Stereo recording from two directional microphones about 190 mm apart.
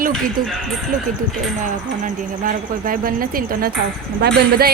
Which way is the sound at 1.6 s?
45° right (ahead or behind).